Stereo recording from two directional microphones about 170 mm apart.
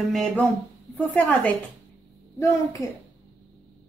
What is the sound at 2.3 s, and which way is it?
Speech, 20° left (ahead or behind).